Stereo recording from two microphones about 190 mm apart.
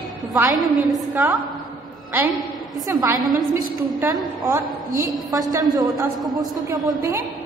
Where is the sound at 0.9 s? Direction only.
15° right (ahead or behind).